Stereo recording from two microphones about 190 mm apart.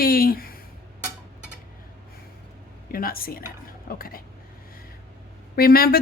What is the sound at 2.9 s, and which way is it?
A woman's voice, 50° left (ahead or behind).